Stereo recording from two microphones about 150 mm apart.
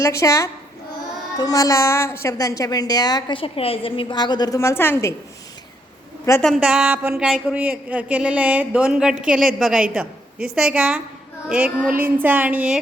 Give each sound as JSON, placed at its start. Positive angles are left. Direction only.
{"t": 0.0, "sound": "a woman's voice", "side_deg": 20}
{"t": 6.4, "sound": "a woman's voice", "side_deg": -5}
{"t": 9.9, "sound": "a sound", "side_deg": -10}
{"t": 10.5, "sound": "a woman's voice", "side_deg": -5}